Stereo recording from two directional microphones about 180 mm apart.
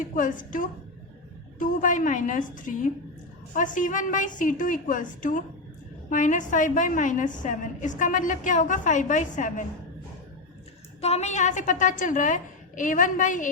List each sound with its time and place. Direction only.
0.0 s a woman's voice: 45° left (ahead or behind)
11.0 s a woman's voice: 35° left (ahead or behind)